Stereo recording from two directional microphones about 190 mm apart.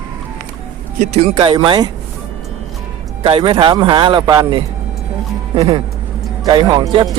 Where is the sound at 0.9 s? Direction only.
35° right (ahead or behind).